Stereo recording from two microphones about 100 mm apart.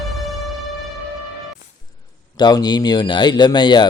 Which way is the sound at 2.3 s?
45° left (ahead or behind).